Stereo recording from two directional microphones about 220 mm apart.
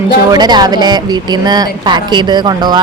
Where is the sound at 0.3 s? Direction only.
20° right (ahead or behind).